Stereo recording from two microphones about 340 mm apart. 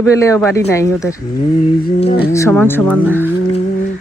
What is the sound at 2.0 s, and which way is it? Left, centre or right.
Speech, left.